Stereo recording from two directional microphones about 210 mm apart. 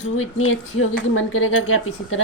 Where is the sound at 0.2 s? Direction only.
80° left.